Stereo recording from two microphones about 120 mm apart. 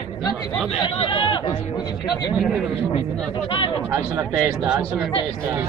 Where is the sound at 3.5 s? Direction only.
45° left (ahead or behind).